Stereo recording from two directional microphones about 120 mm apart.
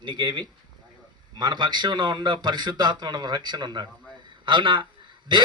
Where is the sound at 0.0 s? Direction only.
40° right (ahead or behind).